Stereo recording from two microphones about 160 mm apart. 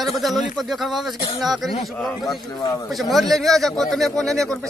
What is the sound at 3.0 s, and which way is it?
A man's voice, centre (ahead or behind).